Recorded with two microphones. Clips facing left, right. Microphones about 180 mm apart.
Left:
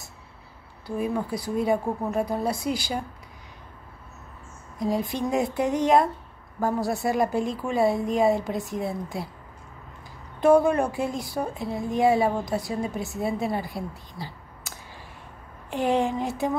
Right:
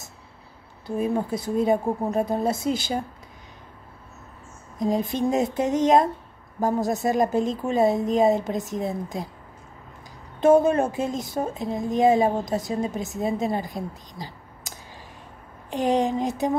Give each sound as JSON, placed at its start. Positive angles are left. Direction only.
{"t": 0.8, "sound": "speech", "side_deg": -25}
{"t": 4.7, "sound": "speech", "side_deg": -20}
{"t": 10.4, "sound": "speech", "side_deg": -20}
{"t": 15.7, "sound": "speech", "side_deg": -20}